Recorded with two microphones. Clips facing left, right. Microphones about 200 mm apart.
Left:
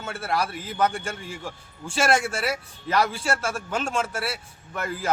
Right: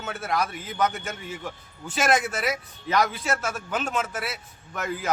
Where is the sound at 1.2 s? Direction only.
Centre (ahead or behind).